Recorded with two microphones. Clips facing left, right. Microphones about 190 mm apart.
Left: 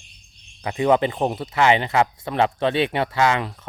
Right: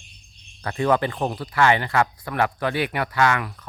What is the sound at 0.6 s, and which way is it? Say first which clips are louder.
Speech: left 3 dB; 15° left (ahead or behind).